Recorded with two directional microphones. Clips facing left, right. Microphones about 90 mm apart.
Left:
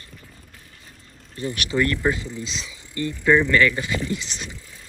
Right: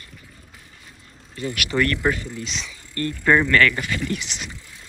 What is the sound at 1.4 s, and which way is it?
Speech, 30° left (ahead or behind).